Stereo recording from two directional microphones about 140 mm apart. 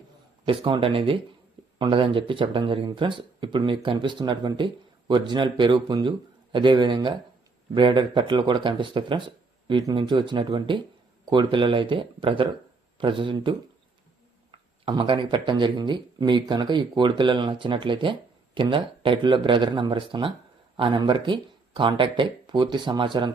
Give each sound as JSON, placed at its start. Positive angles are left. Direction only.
{"t": 0.4, "sound": "speech", "side_deg": -35}
{"t": 14.8, "sound": "speech", "side_deg": -35}